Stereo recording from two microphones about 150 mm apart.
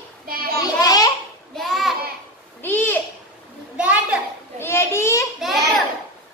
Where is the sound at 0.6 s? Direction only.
25° left (ahead or behind).